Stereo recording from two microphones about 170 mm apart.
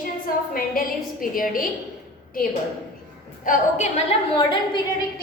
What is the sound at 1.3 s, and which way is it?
Speech, 55° left (ahead or behind).